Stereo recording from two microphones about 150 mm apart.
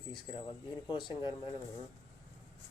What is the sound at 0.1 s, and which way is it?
Speech, 30° left (ahead or behind).